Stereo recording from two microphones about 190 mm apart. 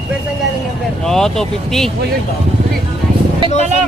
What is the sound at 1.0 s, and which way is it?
Speech, centre (ahead or behind).